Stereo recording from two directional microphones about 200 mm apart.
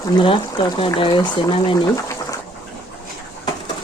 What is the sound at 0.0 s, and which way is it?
Speech, 20° left (ahead or behind).